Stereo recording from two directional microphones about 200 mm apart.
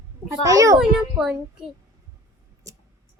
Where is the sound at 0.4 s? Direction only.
15° right (ahead or behind).